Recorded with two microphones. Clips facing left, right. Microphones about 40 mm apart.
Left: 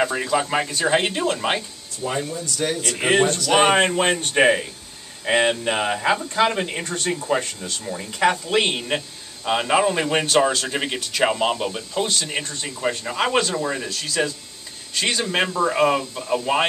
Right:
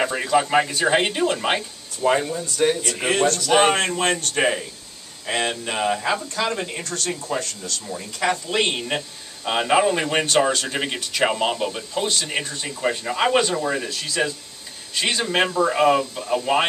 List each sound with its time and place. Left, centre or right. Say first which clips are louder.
0.0 s speech: right 1 dB; centre
2.0 s speech: right 5 dB; right
2.7 s speech: right 1 dB; centre
3.0 s speech: left 4 dB; centre
3.3 s speech: even; centre
3.7 s speech: left 3 dB; centre